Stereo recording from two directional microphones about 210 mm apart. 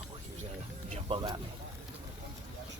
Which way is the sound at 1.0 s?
25° right (ahead or behind).